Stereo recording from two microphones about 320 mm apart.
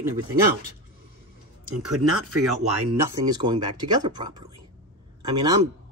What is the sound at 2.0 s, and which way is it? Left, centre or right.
Speech, right.